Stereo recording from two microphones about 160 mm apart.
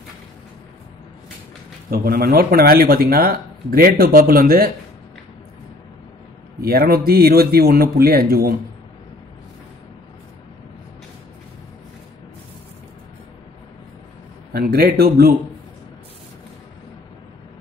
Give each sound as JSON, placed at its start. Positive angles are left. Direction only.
{"t": 1.9, "sound": "speech", "side_deg": -75}
{"t": 6.6, "sound": "speech", "side_deg": -70}
{"t": 14.5, "sound": "speech", "side_deg": -75}